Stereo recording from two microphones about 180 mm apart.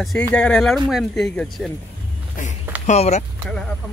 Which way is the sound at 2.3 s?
45° left (ahead or behind).